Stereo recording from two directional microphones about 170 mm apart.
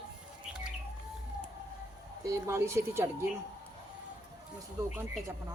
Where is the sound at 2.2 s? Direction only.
15° right (ahead or behind).